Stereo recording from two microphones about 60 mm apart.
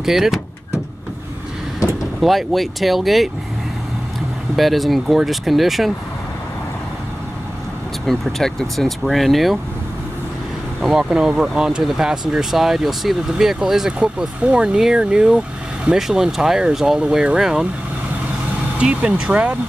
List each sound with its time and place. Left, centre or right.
0.0 s speech: centre
2.2 s speech: centre
4.6 s speech: centre
8.1 s speech: centre
10.8 s speech: centre
13.9 s speech: centre
18.8 s speech: centre